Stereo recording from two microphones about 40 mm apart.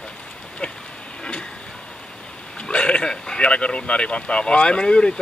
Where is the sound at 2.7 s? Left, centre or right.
Left.